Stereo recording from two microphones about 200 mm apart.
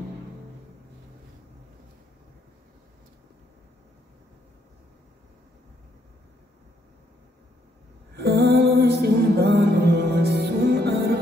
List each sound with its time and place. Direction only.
8.2 s music: 55° right (ahead or behind)